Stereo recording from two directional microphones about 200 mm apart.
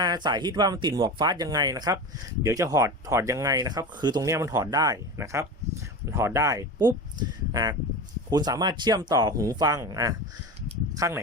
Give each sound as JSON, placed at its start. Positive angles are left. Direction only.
{"t": 0.0, "sound": "speech", "side_deg": -20}